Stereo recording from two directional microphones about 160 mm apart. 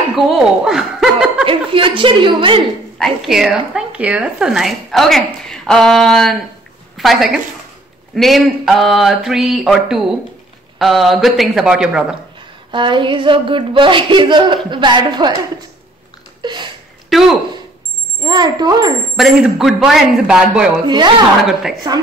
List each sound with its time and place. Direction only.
0.1 s speech: centre (ahead or behind)
1.4 s a sound: 35° right (ahead or behind)
3.0 s a woman's voice: centre (ahead or behind)
12.4 s a sound: 30° right (ahead or behind)
16.3 s a sound: 30° right (ahead or behind)
17.1 s speech: centre (ahead or behind)
18.2 s speech: 25° right (ahead or behind)
19.1 s speech: 5° right (ahead or behind)
20.8 s speech: 25° right (ahead or behind)